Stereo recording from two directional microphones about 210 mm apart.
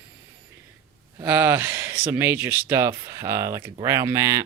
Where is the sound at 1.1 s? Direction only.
10° right (ahead or behind).